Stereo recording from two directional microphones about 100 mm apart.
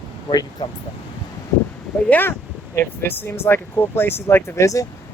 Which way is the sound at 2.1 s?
20° left (ahead or behind).